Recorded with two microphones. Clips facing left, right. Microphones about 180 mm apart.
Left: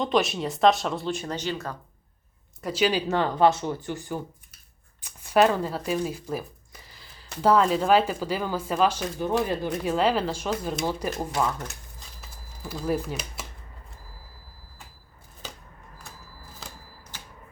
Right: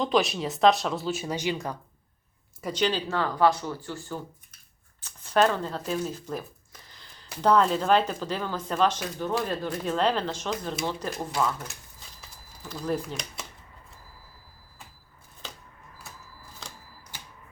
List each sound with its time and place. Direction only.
0.0 s speech: centre (ahead or behind)
2.6 s speech: 5° left (ahead or behind)
3.1 s speech: 20° left (ahead or behind)
12.6 s speech: 10° left (ahead or behind)